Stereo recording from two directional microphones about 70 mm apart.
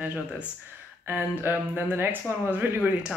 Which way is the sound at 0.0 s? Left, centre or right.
Centre.